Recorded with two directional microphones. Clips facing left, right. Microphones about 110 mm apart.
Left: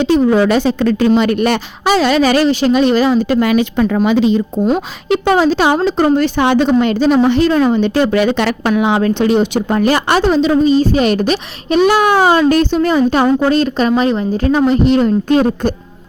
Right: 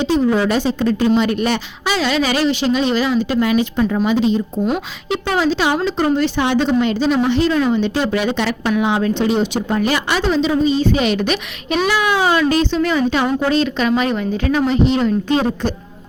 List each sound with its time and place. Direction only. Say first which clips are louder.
0.0 s a woman's voice: left 5 dB; 65° left (ahead or behind); by 3.3 s 45° left (ahead or behind)
3.4 s speech: left 3 dB; 70° left (ahead or behind)
5.4 s a woman's voice: left 5 dB; 45° left (ahead or behind)
9.9 s a woman's voice: left 7 dB; 45° left (ahead or behind)